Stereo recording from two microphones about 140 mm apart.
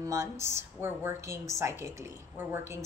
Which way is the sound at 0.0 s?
20° right (ahead or behind).